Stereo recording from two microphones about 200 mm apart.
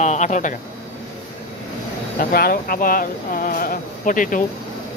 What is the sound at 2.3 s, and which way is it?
Speech, 50° left (ahead or behind).